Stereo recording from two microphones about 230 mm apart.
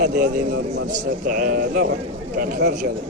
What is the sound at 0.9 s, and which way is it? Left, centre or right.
A man's voice, right.